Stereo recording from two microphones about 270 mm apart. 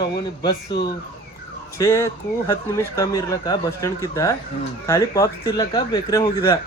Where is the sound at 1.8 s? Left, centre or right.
Centre.